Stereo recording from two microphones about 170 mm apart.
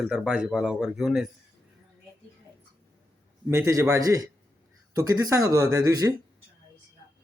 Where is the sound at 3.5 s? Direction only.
15° right (ahead or behind).